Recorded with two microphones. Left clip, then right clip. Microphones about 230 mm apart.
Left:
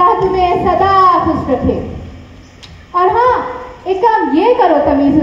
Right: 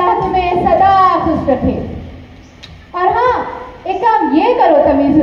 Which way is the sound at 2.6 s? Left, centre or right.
Right.